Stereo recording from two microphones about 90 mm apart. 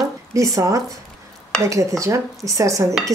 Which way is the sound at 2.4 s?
40° right (ahead or behind).